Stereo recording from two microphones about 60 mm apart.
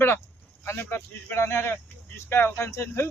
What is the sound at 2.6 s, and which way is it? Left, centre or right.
Speech, left.